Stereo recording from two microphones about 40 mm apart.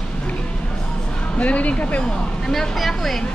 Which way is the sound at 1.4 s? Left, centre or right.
Left.